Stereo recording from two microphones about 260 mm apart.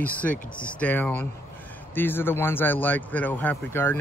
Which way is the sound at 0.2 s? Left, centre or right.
Centre.